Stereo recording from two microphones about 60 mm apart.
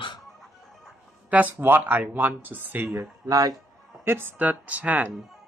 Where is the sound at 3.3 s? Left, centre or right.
Right.